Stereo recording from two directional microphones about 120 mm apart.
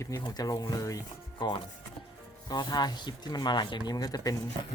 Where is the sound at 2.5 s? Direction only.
35° left (ahead or behind).